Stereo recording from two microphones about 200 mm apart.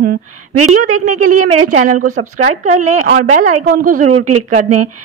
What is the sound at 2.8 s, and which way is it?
Speech, 90° right.